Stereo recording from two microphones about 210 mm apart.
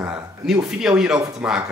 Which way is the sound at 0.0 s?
5° right (ahead or behind).